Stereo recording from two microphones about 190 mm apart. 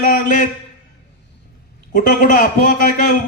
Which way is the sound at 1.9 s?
45° left (ahead or behind).